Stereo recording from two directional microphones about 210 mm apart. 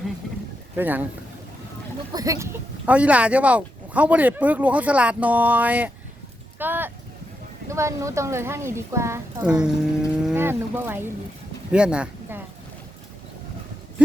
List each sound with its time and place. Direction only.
0.8 s speech: 10° right (ahead or behind)
2.1 s speech: 15° right (ahead or behind)
6.6 s a sound: 10° right (ahead or behind)
7.7 s speech: 15° right (ahead or behind)